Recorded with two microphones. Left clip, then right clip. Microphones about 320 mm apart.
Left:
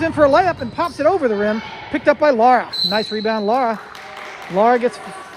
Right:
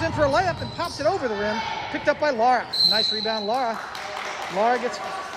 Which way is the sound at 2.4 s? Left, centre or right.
Centre.